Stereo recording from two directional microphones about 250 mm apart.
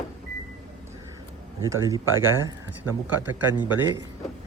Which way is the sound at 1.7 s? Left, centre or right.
Centre.